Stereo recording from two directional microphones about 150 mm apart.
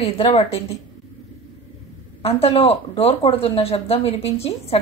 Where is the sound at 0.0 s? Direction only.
40° left (ahead or behind).